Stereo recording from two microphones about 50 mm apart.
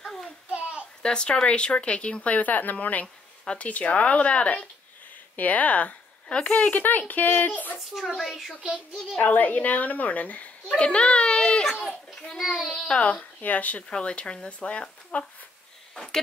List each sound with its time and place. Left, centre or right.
0.0 s a sound: centre
0.5 s a sound: right
1.0 s speech: centre
6.8 s a woman's voice: left
8.2 s a child's voice: centre
9.2 s a woman's voice: left
10.7 s a child's voice: centre
12.4 s a child's voice: centre
12.9 s speech: left
15.9 s a sound: centre